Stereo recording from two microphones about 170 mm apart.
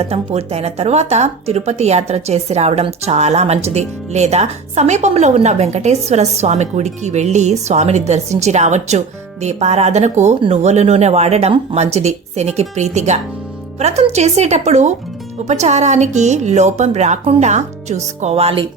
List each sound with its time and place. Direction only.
0.0 s a woman's voice: 35° right (ahead or behind)